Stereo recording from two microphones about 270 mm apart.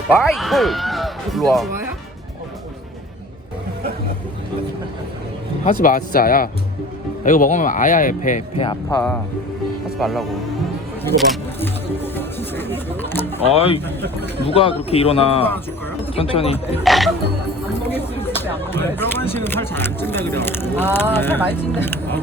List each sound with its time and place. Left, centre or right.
0.2 s speech: centre
5.8 s speech: left
10.0 s speech: centre
11.0 s single-lens reflex camera: centre
12.1 s a sound: centre
13.4 s speech: left
13.8 s speech: centre
14.4 s speech: left
16.8 s speech: centre